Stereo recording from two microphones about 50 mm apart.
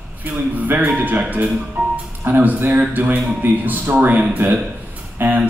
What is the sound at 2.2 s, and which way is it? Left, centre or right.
Speech, right.